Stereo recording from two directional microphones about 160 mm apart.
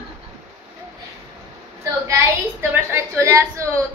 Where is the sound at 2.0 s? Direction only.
10° right (ahead or behind).